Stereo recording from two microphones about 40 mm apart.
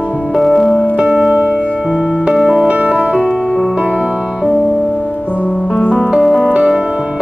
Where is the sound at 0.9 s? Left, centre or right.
Right.